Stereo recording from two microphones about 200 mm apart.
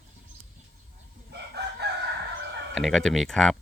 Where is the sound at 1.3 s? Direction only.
55° right (ahead or behind).